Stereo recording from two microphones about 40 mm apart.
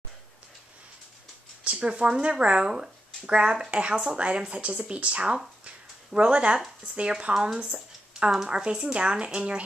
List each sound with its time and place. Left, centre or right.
1.6 s speech: right
7.6 s a sound: right
8.5 s speech: right